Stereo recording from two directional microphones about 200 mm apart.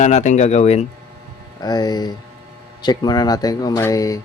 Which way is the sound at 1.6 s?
20° left (ahead or behind).